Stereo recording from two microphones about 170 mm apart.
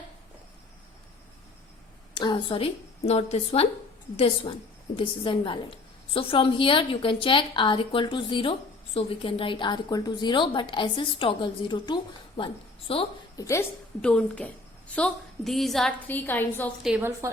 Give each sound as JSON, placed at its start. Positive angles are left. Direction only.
{"t": 2.1, "sound": "a woman's voice", "side_deg": 25}
{"t": 4.9, "sound": "a woman's voice", "side_deg": 30}
{"t": 13.3, "sound": "speech", "side_deg": 20}
{"t": 14.0, "sound": "a woman's voice", "side_deg": 5}
{"t": 16.8, "sound": "a woman's voice", "side_deg": -5}
{"t": 17.1, "sound": "a woman's voice", "side_deg": -15}